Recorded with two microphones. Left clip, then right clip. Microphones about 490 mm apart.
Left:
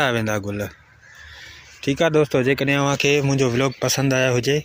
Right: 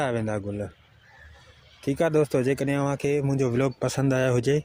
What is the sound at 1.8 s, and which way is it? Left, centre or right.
Speech, right.